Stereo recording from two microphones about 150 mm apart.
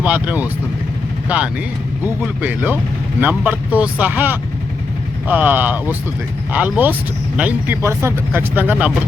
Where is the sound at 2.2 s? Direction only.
10° right (ahead or behind).